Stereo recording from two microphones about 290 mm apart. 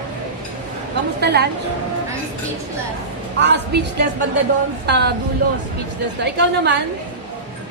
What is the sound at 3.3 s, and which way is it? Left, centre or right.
A woman's voice, right.